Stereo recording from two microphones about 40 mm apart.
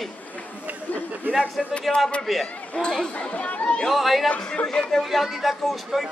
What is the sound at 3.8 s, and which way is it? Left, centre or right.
Speech, centre.